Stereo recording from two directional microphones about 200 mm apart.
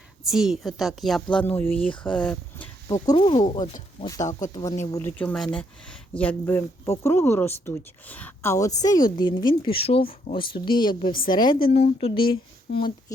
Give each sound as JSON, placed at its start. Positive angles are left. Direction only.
{"t": 0.3, "sound": "a woman's voice", "side_deg": -5}
{"t": 2.9, "sound": "speech", "side_deg": 20}